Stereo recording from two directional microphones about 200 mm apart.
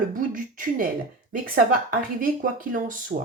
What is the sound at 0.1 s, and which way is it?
Speech, 40° right (ahead or behind).